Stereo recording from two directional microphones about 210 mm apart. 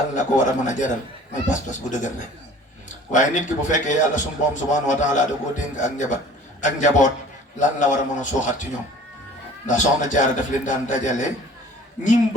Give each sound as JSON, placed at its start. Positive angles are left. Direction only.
{"t": 0.2, "sound": "a man's voice", "side_deg": 35}
{"t": 9.6, "sound": "a man's voice", "side_deg": 35}